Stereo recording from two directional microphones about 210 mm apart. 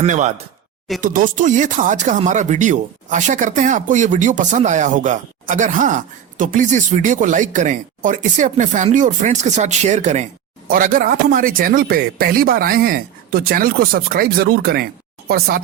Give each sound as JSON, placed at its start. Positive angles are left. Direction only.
{"t": 0.0, "sound": "a man's voice", "side_deg": -35}